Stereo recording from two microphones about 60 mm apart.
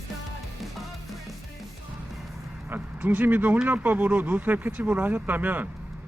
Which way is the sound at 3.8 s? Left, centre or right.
Right.